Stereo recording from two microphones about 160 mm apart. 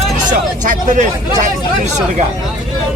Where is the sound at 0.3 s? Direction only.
50° right (ahead or behind).